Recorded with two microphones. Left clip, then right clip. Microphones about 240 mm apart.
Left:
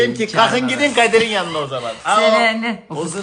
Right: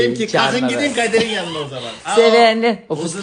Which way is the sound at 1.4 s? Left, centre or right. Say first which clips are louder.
Left 3 dB; centre.